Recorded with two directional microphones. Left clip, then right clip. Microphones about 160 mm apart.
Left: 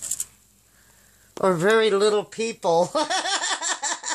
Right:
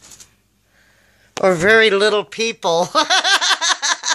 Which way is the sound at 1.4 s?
10° right (ahead or behind).